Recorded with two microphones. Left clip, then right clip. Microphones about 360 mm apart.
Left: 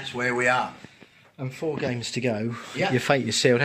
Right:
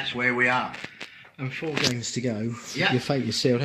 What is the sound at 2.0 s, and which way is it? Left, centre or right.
A man's voice, left.